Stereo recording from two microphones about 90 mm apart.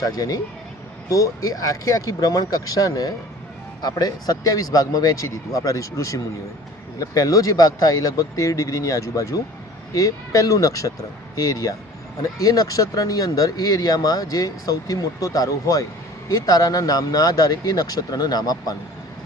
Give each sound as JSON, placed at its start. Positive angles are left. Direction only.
{"t": 0.0, "sound": "speech", "side_deg": 45}